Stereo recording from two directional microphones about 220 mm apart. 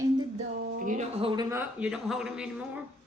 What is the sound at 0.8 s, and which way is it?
Speech, 35° right (ahead or behind).